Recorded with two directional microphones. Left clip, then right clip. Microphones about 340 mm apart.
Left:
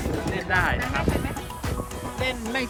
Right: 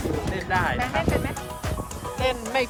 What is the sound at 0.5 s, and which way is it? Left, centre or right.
Music, right.